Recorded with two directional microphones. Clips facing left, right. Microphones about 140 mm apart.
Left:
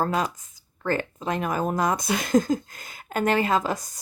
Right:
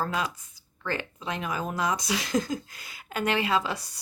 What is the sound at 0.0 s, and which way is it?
A woman's voice, 45° left (ahead or behind).